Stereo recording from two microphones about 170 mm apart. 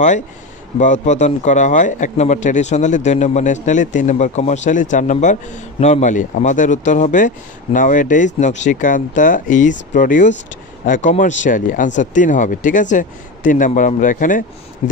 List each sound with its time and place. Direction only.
0.7 s a man's voice: 45° left (ahead or behind)
14.8 s speech: 40° left (ahead or behind)